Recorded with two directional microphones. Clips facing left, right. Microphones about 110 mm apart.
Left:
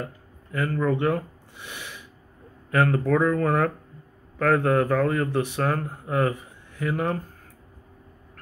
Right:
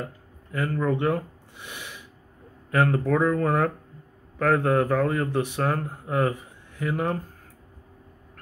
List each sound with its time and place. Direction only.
0.6 s speech: 20° right (ahead or behind)
2.7 s speech: 20° right (ahead or behind)